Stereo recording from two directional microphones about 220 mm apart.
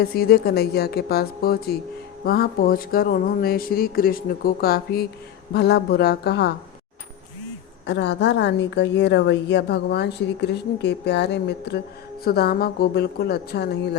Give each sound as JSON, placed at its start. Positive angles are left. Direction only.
{"t": 0.0, "sound": "a woman's voice", "side_deg": 45}
{"t": 7.9, "sound": "a woman's voice", "side_deg": 55}